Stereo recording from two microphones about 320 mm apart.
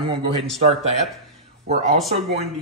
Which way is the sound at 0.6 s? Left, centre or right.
Centre.